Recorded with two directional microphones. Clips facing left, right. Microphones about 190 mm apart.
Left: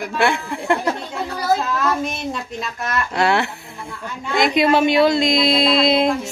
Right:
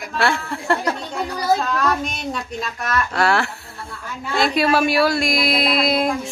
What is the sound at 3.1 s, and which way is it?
Speech, 20° left (ahead or behind).